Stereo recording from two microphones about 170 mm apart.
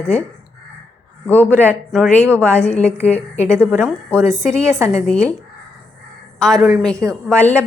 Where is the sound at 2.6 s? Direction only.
10° left (ahead or behind).